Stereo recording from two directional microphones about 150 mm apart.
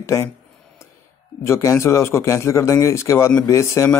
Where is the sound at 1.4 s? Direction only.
20° left (ahead or behind).